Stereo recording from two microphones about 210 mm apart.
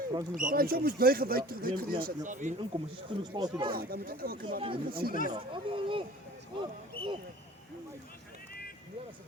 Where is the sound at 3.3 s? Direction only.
20° right (ahead or behind).